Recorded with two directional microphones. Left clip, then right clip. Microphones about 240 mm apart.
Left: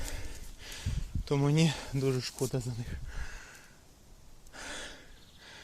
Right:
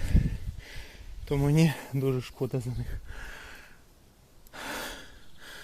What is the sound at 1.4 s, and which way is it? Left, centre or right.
Speech, right.